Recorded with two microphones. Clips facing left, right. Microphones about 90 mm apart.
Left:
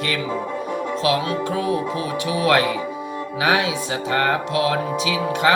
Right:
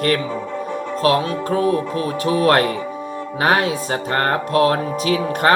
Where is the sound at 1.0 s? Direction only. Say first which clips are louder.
Right 4 dB; 45° right (ahead or behind).